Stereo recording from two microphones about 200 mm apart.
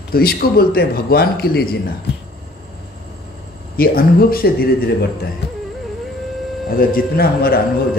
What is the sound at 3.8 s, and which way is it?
Speech, 50° left (ahead or behind).